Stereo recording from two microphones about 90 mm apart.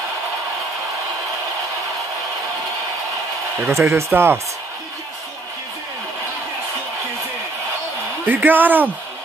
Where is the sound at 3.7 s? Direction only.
30° right (ahead or behind).